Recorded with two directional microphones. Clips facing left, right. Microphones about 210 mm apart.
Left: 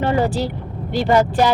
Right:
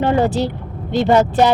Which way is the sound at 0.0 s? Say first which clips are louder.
Right 3 dB; 20° right (ahead or behind).